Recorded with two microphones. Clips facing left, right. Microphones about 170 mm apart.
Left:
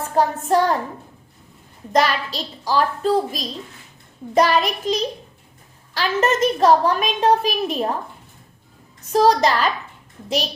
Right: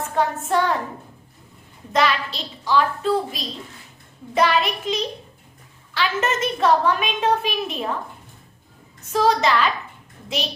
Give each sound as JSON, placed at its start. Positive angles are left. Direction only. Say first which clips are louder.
{"t": 0.1, "sound": "a woman's voice", "louder": "left 4 dB", "side_deg": 40}
{"t": 1.9, "sound": "a woman's voice", "louder": "left 2 dB", "side_deg": 40}
{"t": 9.1, "sound": "a woman's voice", "louder": "left 3 dB", "side_deg": 40}